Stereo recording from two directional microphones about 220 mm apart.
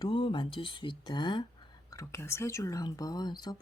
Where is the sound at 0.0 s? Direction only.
20° left (ahead or behind).